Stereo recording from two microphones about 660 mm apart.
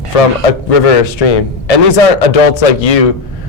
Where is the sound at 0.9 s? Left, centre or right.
Left.